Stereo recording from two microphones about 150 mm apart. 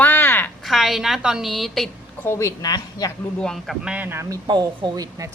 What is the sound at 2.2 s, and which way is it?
Speech, 20° left (ahead or behind).